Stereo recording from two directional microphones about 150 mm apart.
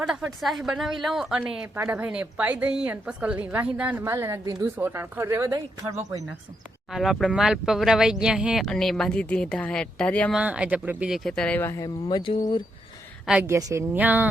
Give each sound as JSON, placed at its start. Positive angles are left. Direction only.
{"t": 0.0, "sound": "a woman's voice", "side_deg": -5}
{"t": 6.9, "sound": "speech", "side_deg": 0}
{"t": 10.3, "sound": "speech", "side_deg": -10}
{"t": 12.0, "sound": "speech", "side_deg": 30}
{"t": 13.4, "sound": "a woman's voice", "side_deg": -20}